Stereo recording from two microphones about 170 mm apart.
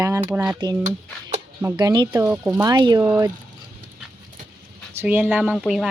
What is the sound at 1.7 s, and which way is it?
Speech, 25° right (ahead or behind).